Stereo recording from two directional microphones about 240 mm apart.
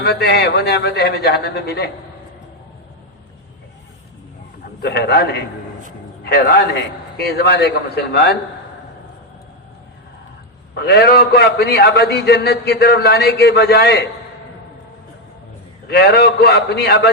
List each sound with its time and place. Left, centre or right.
0.0 s a man's voice: left
4.8 s a man's voice: left
10.8 s a man's voice: left
15.9 s a man's voice: left